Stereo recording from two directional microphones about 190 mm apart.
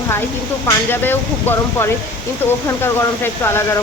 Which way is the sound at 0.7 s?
10° left (ahead or behind).